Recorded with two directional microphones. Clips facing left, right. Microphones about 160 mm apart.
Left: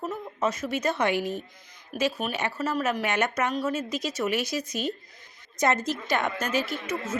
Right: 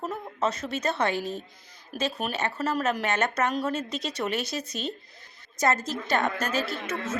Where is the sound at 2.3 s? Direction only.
10° left (ahead or behind).